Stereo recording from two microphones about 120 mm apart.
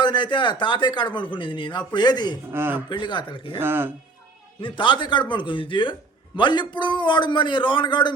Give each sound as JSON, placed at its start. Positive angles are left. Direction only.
{"t": 0.0, "sound": "speech", "side_deg": 40}
{"t": 2.5, "sound": "speech", "side_deg": -20}
{"t": 2.9, "sound": "speech", "side_deg": 40}
{"t": 3.6, "sound": "speech", "side_deg": -20}
{"t": 4.6, "sound": "speech", "side_deg": 45}